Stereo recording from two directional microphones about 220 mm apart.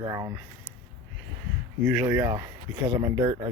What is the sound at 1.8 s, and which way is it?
Speech, 10° right (ahead or behind).